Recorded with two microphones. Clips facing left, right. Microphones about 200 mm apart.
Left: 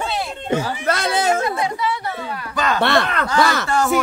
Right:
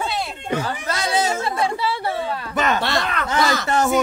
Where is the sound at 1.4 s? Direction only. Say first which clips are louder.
Left 1 dB; 30° right (ahead or behind).